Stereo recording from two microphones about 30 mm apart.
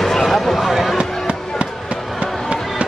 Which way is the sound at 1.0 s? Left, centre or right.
Right.